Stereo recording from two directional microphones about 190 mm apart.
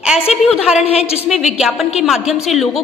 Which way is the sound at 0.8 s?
30° left (ahead or behind).